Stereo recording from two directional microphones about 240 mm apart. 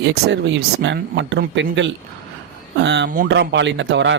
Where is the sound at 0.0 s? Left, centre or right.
Right.